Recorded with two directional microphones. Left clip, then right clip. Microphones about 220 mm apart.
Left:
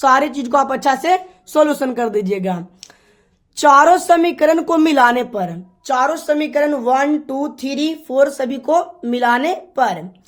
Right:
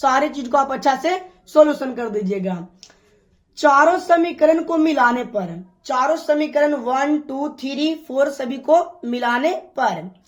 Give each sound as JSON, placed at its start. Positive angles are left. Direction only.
{"t": 0.0, "sound": "a woman's voice", "side_deg": 25}